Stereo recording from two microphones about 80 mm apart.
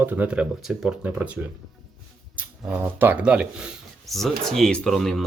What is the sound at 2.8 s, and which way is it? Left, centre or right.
Speech, right.